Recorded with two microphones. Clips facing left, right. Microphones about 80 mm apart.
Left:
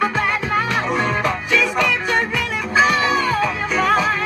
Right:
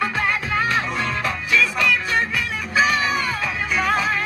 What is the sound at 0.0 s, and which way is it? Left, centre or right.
Music, centre.